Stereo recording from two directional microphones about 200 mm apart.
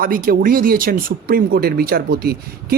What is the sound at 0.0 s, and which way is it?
A man's voice, 45° right (ahead or behind).